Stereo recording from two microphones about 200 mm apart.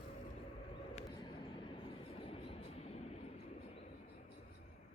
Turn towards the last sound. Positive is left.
turn(degrees=30)  # may be behind; listen again after turning